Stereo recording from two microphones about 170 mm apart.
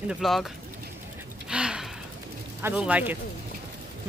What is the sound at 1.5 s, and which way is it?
Gasp, 5° right (ahead or behind).